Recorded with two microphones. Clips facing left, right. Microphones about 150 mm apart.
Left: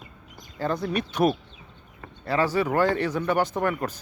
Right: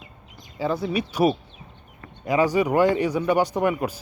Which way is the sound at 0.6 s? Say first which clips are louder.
Right 2 dB; 5° right (ahead or behind).